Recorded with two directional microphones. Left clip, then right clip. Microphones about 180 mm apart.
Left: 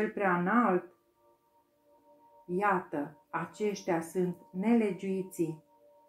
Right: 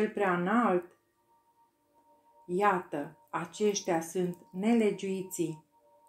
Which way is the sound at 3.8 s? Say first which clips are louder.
Right 1 dB; 55° right (ahead or behind).